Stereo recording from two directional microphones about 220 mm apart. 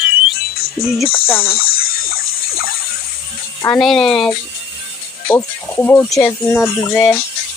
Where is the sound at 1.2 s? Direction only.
25° left (ahead or behind).